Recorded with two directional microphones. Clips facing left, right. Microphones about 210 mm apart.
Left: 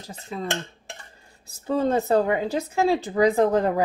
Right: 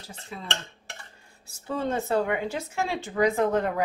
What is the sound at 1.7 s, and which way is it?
Speech, 35° left (ahead or behind).